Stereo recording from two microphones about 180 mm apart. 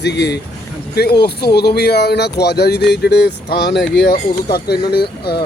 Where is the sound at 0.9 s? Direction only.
60° left (ahead or behind).